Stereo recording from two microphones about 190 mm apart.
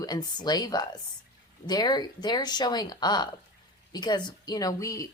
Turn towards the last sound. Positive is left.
turn(degrees=20)  # may be behind; listen again after turning